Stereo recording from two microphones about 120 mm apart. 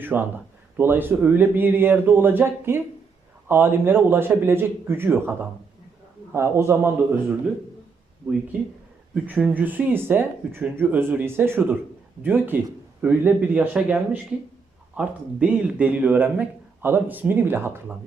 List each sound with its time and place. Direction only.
0.0 s a man's voice: 15° right (ahead or behind)
8.2 s a man's voice: 15° right (ahead or behind)